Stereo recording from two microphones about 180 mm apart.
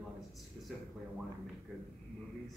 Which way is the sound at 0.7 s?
Centre (ahead or behind).